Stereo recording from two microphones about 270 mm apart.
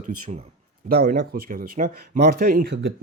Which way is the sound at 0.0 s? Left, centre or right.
Right.